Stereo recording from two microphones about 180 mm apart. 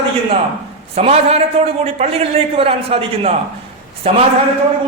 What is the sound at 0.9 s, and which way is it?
A man's voice, 35° right (ahead or behind).